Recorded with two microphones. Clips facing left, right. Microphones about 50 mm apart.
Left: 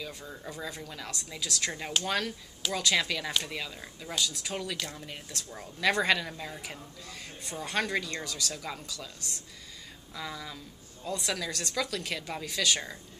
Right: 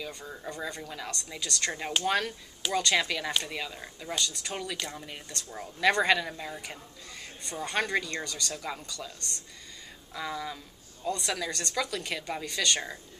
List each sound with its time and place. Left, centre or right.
0.0 s speech: centre
10.1 s speech: centre
11.1 s speech: centre